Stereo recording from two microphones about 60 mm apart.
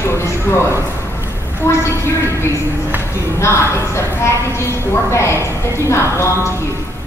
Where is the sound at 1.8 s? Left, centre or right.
Left.